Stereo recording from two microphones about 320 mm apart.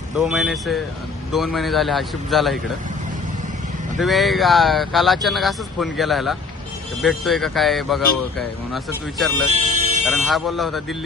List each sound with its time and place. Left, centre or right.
0.1 s speech: centre
4.0 s speech: centre
9.5 s speech: right
10.1 s speech: centre